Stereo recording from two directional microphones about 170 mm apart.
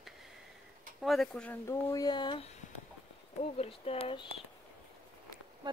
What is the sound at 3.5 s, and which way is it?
Speech, 35° left (ahead or behind).